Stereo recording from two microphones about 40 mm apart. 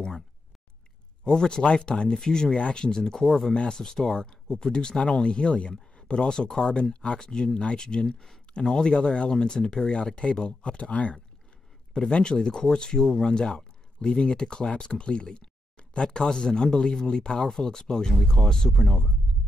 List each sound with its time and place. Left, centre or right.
1.2 s speech: centre
2.5 s speech: left
2.8 s speech: centre
3.5 s speech: centre
7.2 s speech: centre; by 11.2 s left
11.9 s speech: left